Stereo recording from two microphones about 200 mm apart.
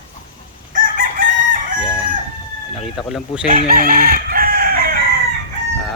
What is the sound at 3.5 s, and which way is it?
Chicken, 45° right (ahead or behind).